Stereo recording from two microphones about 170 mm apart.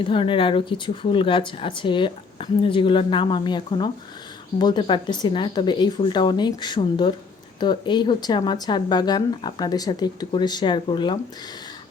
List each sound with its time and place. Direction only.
0.0 s speech: 30° left (ahead or behind)